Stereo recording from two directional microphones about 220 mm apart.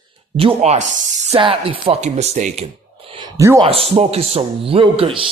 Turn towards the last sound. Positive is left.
turn(degrees=-25)  # may be behind; listen again after turning